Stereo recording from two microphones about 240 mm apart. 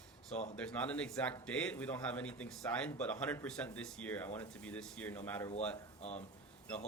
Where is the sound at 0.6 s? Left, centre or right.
Centre.